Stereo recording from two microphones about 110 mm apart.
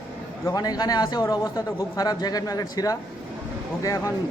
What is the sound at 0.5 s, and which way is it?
Speech, 35° left (ahead or behind).